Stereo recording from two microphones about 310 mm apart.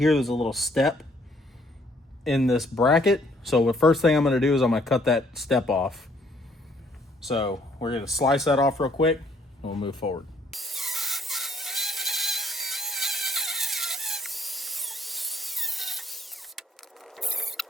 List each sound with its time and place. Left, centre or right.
0.0 s speech: centre
2.2 s speech: centre
7.3 s speech: centre
8.3 s speech: centre
10.0 s speech: left
10.5 s a sound: centre